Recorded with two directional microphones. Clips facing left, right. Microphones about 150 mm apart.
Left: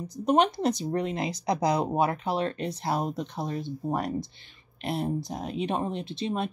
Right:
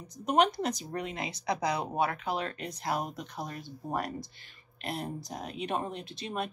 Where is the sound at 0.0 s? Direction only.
35° left (ahead or behind).